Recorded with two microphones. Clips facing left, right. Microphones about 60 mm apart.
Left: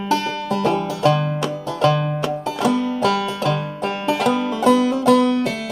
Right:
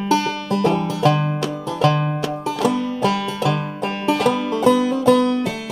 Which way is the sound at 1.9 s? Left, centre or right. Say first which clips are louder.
Even; right.